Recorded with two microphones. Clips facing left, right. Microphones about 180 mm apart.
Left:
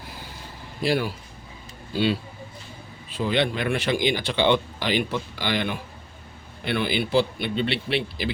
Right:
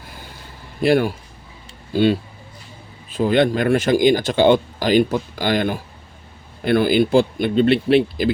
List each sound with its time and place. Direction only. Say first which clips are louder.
0.8 s speech: right 8 dB; 50° right (ahead or behind)